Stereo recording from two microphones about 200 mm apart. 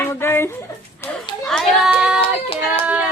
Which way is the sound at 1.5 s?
Centre (ahead or behind).